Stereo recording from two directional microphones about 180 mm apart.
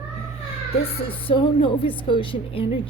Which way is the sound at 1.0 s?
30° left (ahead or behind).